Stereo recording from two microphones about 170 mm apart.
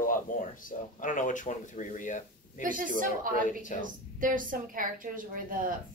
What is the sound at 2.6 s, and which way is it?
A woman's voice, 50° right (ahead or behind).